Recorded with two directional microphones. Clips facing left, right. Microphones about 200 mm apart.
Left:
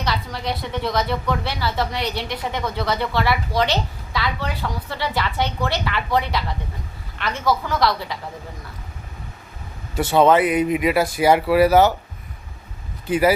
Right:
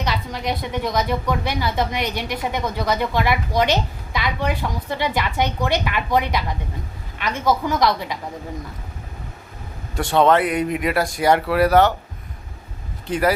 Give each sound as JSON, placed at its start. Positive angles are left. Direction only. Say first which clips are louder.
{"t": 0.0, "sound": "a woman's voice", "louder": "right 1 dB", "side_deg": -15}
{"t": 9.9, "sound": "speech", "louder": "left 1 dB", "side_deg": 5}
{"t": 13.1, "sound": "speech", "louder": "left 2 dB", "side_deg": 5}